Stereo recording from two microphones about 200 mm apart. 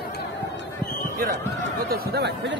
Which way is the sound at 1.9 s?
55° right (ahead or behind).